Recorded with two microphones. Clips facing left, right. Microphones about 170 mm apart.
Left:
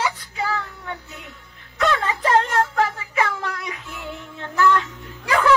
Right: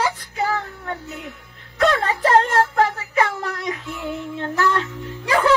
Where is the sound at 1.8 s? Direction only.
35° right (ahead or behind).